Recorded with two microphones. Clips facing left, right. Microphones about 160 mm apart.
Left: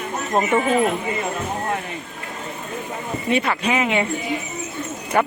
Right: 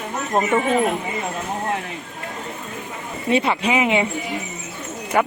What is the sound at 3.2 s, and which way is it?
Speech, 20° right (ahead or behind).